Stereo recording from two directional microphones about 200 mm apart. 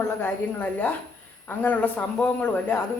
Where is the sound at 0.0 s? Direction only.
10° left (ahead or behind).